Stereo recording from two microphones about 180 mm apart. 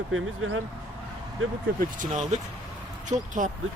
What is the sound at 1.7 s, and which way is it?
Speech, 45° right (ahead or behind).